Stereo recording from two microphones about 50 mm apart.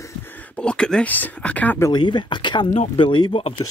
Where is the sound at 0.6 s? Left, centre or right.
Centre.